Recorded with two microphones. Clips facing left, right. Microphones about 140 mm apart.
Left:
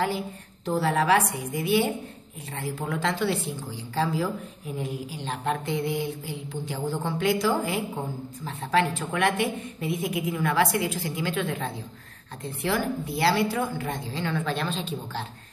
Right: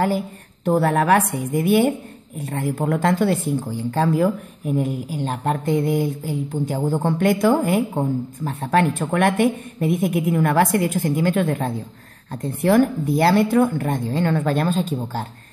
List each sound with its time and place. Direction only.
0.7 s speech: 55° right (ahead or behind)